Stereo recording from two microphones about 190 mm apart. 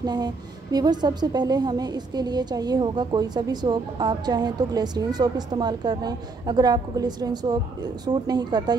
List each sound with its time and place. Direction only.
0.0 s a woman's voice: 20° right (ahead or behind)